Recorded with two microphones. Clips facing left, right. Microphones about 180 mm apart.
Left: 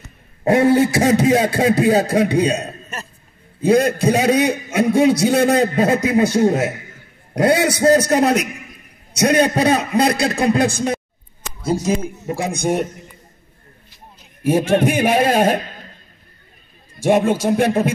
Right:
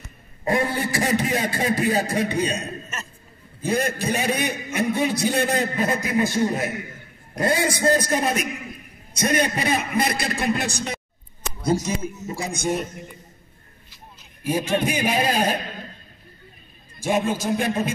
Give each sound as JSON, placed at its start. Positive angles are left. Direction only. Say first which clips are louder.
{"t": 0.4, "sound": "speech", "louder": "left 10 dB", "side_deg": 85}
{"t": 3.6, "sound": "a man's voice", "louder": "left 9 dB", "side_deg": 75}
{"t": 7.3, "sound": "a man's voice", "louder": "left 7 dB", "side_deg": 75}
{"t": 10.7, "sound": "a man's voice", "louder": "left 9 dB", "side_deg": 50}
{"t": 14.4, "sound": "a man's voice", "louder": "left 7 dB", "side_deg": 50}
{"t": 17.0, "sound": "speech", "louder": "left 7 dB", "side_deg": 65}